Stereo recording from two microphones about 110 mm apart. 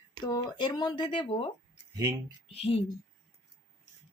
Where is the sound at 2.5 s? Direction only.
65° left (ahead or behind).